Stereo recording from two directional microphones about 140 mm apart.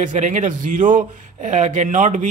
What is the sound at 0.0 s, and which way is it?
A man's voice, 65° right (ahead or behind).